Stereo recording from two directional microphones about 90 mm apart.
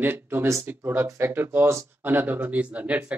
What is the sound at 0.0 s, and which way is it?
Speech, 20° right (ahead or behind).